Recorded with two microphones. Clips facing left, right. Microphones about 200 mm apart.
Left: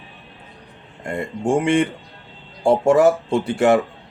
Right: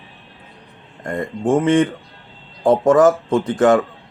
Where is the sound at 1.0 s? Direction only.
10° left (ahead or behind).